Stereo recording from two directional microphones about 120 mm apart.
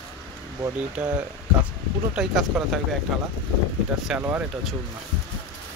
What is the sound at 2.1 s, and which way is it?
Speech, 5° right (ahead or behind).